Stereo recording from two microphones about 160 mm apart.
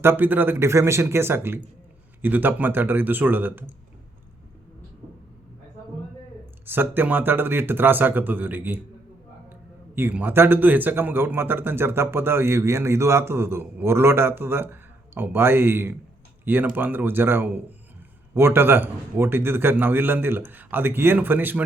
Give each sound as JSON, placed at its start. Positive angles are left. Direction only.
{"t": 0.0, "sound": "speech", "side_deg": -15}
{"t": 6.7, "sound": "speech", "side_deg": -15}
{"t": 9.9, "sound": "speech", "side_deg": -10}